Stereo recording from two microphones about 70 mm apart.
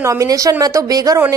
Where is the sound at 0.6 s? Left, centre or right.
Right.